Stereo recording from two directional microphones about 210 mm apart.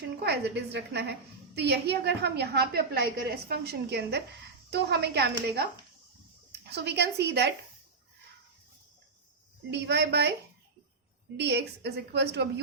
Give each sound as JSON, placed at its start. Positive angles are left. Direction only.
{"t": 0.2, "sound": "a woman's voice", "side_deg": -50}
{"t": 9.6, "sound": "a woman's voice", "side_deg": -55}
{"t": 11.3, "sound": "a woman's voice", "side_deg": -55}